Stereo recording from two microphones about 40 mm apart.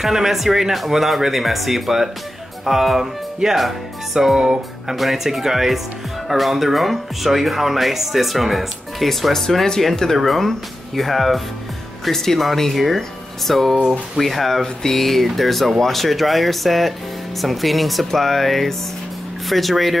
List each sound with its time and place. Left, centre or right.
0.0 s speech: centre
4.9 s speech: centre